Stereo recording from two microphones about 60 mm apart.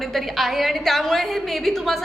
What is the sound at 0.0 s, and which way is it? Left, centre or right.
A woman's voice, centre.